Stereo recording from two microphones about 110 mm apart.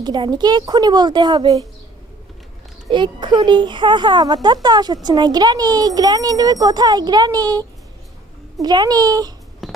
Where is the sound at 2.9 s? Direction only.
45° right (ahead or behind).